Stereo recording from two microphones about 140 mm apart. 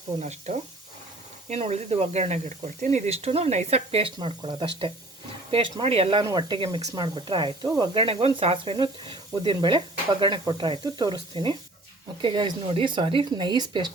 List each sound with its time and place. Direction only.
0.2 s speech: 55° right (ahead or behind); by 7.9 s 30° right (ahead or behind)
7.9 s speech: 40° right (ahead or behind)